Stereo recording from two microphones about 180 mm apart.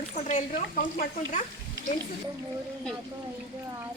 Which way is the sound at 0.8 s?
50° left (ahead or behind).